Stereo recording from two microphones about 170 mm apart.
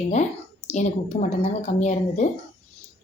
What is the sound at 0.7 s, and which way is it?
A woman's voice, 40° left (ahead or behind).